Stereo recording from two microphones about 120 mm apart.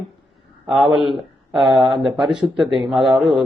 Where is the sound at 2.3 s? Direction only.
40° right (ahead or behind).